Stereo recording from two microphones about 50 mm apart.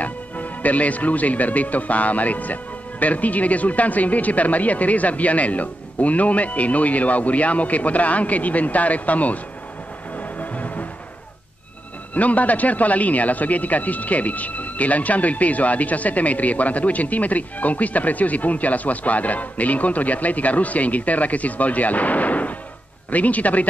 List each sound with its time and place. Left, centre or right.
0.0 s speech: left
10.4 s music: left
12.1 s speech: left